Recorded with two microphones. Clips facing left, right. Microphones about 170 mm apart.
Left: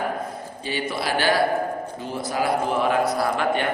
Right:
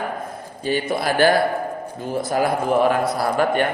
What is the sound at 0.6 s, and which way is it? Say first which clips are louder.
Speech: right 6 dB; 45° right (ahead or behind).